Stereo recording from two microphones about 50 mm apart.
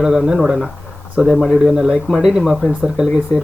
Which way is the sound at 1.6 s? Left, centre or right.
Centre.